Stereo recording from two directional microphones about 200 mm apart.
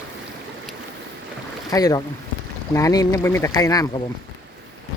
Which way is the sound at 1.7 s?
20° left (ahead or behind).